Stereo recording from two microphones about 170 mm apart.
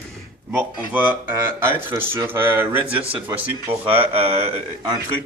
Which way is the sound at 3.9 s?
35° right (ahead or behind).